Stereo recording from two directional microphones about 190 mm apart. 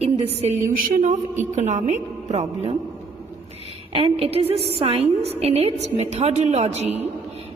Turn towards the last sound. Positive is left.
turn(degrees=-35)  # may be behind; listen again after turning